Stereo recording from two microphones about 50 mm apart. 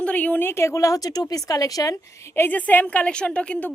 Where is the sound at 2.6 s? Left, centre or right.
Left.